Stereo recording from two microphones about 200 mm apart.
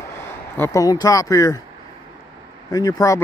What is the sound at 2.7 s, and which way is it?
Speech, 15° left (ahead or behind).